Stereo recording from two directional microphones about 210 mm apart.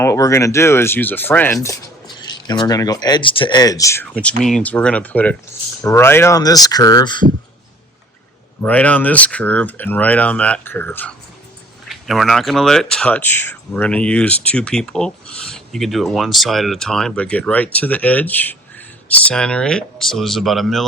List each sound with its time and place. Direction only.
0.0 s speech: 15° left (ahead or behind)
8.6 s speech: 5° left (ahead or behind)